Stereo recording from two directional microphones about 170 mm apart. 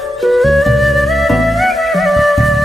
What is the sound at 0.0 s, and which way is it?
Music, centre (ahead or behind).